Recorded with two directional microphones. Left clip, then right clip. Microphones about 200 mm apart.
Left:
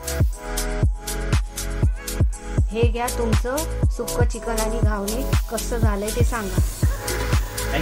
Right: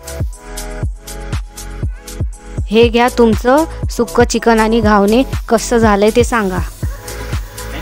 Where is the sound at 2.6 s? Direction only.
60° right (ahead or behind).